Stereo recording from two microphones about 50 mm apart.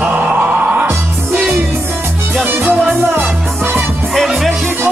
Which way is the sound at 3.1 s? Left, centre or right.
Right.